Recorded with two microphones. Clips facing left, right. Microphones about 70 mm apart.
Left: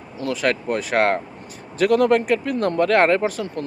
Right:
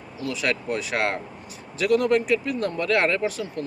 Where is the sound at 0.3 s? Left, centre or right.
Left.